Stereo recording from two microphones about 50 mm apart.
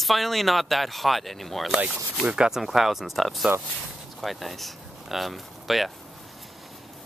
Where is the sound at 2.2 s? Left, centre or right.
Centre.